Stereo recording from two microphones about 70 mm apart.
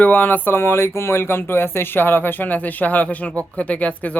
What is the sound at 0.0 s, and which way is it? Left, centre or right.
Speech, left.